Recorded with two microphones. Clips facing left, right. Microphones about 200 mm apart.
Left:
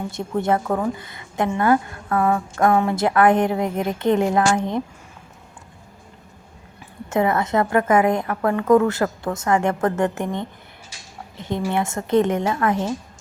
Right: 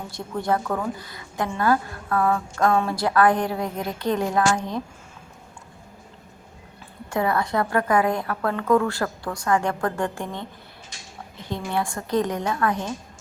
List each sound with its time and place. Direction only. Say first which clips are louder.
0.2 s a woman's voice: left 3 dB; 20° left (ahead or behind)
7.1 s a woman's voice: left 4 dB; 20° left (ahead or behind)